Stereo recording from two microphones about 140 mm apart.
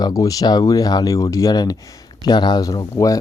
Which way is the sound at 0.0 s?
25° left (ahead or behind).